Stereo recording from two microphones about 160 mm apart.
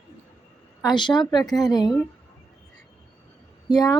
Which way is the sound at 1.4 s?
Centre (ahead or behind).